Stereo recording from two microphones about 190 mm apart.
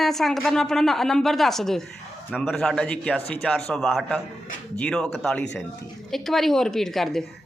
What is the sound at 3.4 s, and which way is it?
Speech, 5° left (ahead or behind).